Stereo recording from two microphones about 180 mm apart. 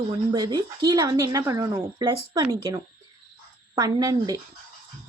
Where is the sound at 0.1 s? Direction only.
25° right (ahead or behind).